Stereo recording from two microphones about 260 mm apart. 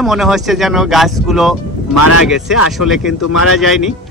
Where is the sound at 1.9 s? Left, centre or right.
Left.